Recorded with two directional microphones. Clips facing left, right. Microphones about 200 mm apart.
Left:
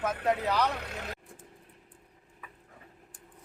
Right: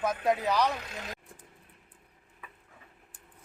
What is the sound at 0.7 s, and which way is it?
Speech, 60° left (ahead or behind).